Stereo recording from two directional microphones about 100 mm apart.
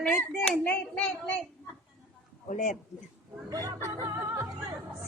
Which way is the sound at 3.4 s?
35° right (ahead or behind).